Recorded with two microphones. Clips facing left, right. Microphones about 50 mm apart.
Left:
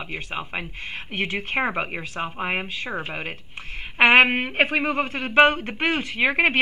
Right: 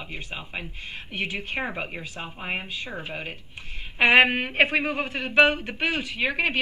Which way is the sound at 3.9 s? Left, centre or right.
Left.